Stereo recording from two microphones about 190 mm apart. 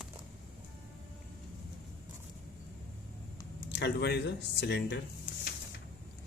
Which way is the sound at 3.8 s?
60° left (ahead or behind).